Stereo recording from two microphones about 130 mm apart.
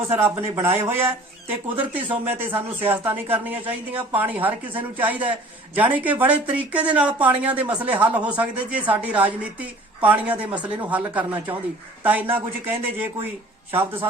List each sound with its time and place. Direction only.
0.1 s speech: 20° right (ahead or behind)